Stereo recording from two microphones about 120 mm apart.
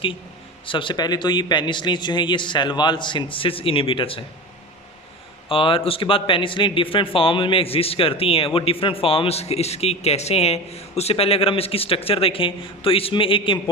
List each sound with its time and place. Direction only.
0.6 s a man's voice: 45° left (ahead or behind)
5.5 s a man's voice: 50° left (ahead or behind)